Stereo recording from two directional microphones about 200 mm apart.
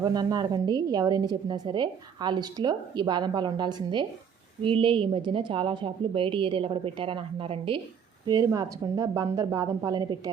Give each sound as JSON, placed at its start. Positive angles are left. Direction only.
{"t": 0.0, "sound": "a woman's voice", "side_deg": -20}